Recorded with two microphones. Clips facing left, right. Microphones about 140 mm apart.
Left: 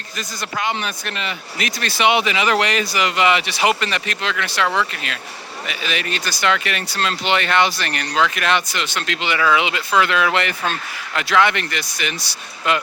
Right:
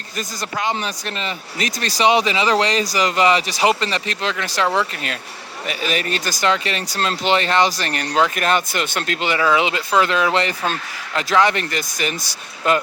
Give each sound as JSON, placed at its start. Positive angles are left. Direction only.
{"t": 0.2, "sound": "speech", "side_deg": -35}